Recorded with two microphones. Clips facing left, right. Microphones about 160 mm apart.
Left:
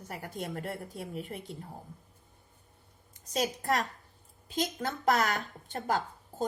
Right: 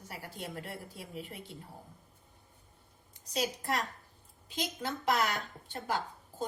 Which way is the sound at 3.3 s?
45° left (ahead or behind).